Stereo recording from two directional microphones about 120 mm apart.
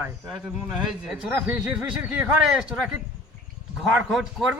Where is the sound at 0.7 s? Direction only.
5° right (ahead or behind).